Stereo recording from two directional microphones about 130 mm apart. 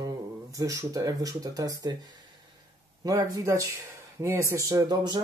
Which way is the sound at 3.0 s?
30° right (ahead or behind).